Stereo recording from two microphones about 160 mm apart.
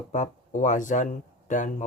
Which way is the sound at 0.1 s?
50° left (ahead or behind).